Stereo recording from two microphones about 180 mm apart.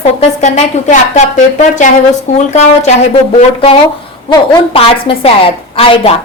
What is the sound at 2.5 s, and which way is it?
Speech, 40° left (ahead or behind).